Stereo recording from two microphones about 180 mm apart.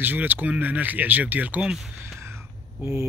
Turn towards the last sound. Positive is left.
turn(degrees=-15)  # may be behind; listen again after turning